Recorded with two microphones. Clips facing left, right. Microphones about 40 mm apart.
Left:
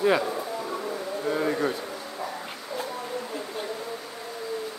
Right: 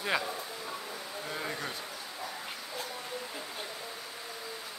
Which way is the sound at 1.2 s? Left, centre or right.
Centre.